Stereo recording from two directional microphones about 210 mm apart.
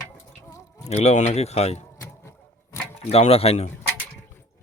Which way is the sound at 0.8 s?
30° left (ahead or behind).